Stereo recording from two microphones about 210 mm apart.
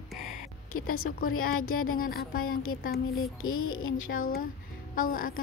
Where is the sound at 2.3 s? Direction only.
80° left.